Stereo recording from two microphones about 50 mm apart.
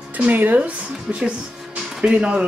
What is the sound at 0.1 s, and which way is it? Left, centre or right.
Speech, right.